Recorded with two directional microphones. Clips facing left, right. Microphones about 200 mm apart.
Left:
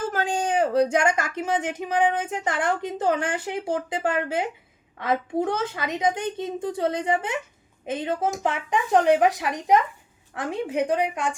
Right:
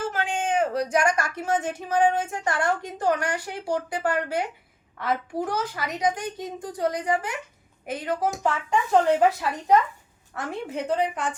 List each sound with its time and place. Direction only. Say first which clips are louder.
0.1 s speech: left 2 dB; 40° left (ahead or behind); by 11.3 s 10° left (ahead or behind)